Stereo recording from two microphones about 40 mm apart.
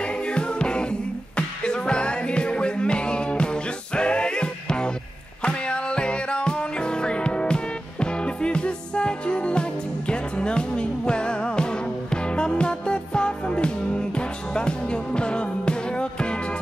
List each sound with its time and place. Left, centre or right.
0.0 s music: left